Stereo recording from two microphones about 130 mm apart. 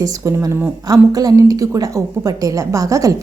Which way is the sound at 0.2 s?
20° right (ahead or behind).